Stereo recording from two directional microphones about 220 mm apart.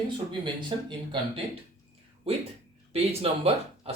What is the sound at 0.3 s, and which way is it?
Speech, 20° right (ahead or behind).